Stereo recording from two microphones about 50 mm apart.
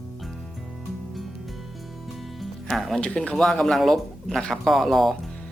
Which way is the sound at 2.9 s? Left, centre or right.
Left.